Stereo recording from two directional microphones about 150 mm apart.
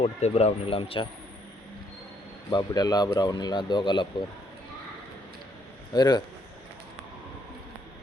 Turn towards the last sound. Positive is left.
turn(degrees=30)  # may be behind; listen again after turning